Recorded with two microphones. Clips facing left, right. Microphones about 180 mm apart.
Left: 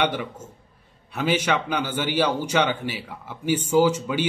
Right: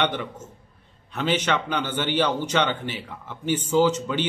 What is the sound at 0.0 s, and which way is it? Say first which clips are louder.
A man's voice: left 1 dB; 10° left (ahead or behind).